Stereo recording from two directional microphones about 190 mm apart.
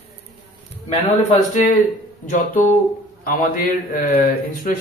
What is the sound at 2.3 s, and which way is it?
Speech, 40° left (ahead or behind).